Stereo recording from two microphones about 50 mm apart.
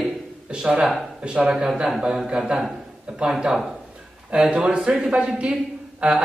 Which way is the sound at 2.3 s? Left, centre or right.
Centre.